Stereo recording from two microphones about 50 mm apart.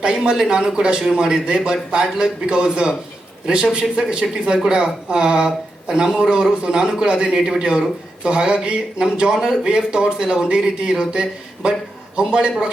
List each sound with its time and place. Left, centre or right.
0.3 s a man's voice: centre